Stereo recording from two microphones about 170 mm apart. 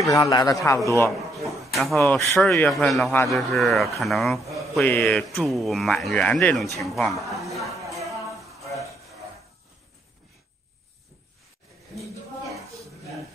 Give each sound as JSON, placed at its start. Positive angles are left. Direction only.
{"t": 0.0, "sound": "a man's voice", "side_deg": 20}
{"t": 1.7, "sound": "a sound", "side_deg": 0}
{"t": 2.0, "sound": "speech", "side_deg": 15}
{"t": 2.4, "sound": "speech", "side_deg": 0}